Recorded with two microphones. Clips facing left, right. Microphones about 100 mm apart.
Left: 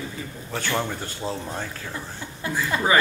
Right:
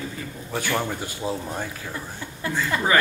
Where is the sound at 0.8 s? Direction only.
10° right (ahead or behind).